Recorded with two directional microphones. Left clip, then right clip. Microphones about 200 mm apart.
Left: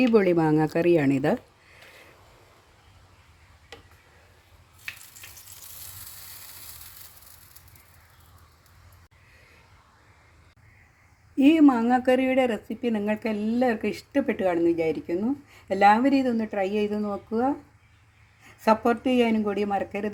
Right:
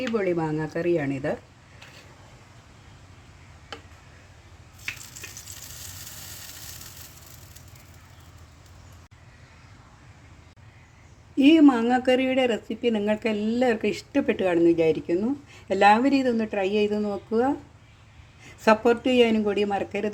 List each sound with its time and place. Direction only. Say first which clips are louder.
0.1 s speech: left 5 dB; 50° left (ahead or behind)
11.3 s speech: right 1 dB; 5° left (ahead or behind)